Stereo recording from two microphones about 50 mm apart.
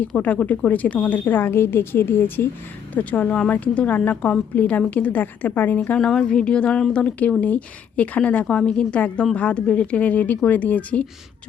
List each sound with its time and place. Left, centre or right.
0.2 s a woman's voice: left
2.9 s a woman's voice: left
3.2 s speech: left
3.5 s a woman's voice: left
6.0 s speech: centre
8.4 s speech: centre